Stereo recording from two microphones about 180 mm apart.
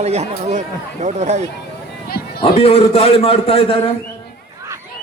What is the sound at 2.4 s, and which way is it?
A man's voice, 30° left (ahead or behind).